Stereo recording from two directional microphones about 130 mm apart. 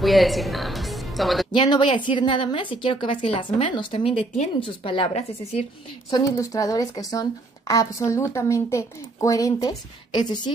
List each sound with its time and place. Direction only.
0.0 s music: centre (ahead or behind)
1.5 s a woman's voice: 35° left (ahead or behind); by 5.7 s 55° left (ahead or behind)
6.0 s speech: 30° left (ahead or behind)